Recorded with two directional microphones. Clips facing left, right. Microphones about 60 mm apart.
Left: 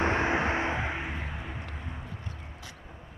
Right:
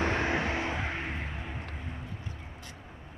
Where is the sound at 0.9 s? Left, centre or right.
Centre.